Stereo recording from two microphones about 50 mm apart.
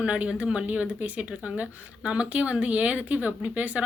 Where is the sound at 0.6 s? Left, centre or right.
Right.